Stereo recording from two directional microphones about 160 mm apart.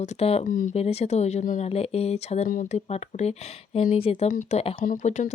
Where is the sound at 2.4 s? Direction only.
55° left (ahead or behind); by 4.3 s 35° left (ahead or behind).